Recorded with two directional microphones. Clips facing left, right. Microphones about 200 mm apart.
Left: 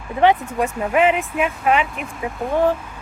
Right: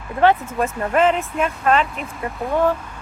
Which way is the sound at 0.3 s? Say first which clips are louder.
Left 1 dB; centre (ahead or behind).